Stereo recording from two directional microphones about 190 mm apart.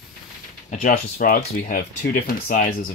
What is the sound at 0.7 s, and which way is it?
Speech, 45° left (ahead or behind).